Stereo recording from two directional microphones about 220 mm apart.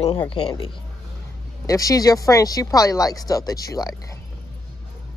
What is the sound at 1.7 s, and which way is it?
Speech, 15° left (ahead or behind).